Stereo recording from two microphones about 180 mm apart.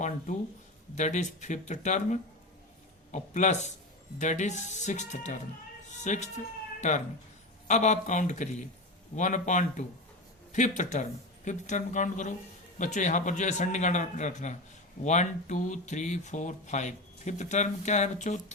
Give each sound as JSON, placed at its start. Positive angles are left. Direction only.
{"t": 0.9, "sound": "speech", "side_deg": 40}
{"t": 7.7, "sound": "speech", "side_deg": 40}